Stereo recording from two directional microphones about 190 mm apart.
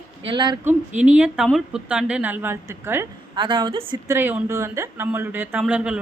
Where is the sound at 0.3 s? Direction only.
25° right (ahead or behind).